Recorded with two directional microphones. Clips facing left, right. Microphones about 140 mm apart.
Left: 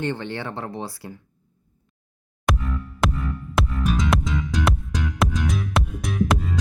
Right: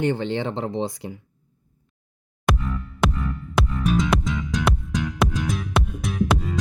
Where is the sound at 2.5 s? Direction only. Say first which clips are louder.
Right 1 dB; centre (ahead or behind).